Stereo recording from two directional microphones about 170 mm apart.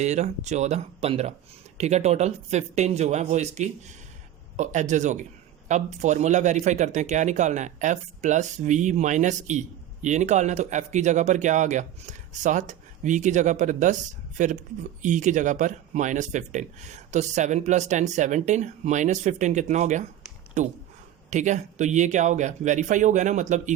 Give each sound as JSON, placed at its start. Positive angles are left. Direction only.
{"t": 0.0, "sound": "speech", "side_deg": -40}
{"t": 21.2, "sound": "speech", "side_deg": -45}